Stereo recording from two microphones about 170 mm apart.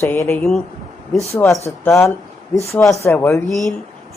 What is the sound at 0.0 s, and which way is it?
Speech, 15° left (ahead or behind).